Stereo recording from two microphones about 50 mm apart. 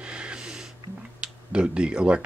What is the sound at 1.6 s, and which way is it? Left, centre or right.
Speech, right.